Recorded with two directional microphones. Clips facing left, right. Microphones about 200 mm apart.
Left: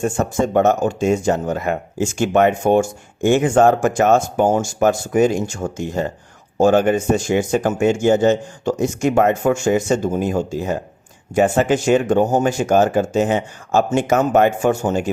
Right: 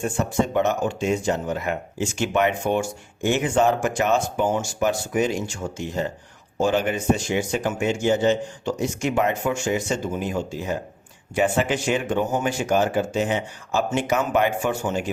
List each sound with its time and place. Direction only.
0.0 s speech: 45° left (ahead or behind)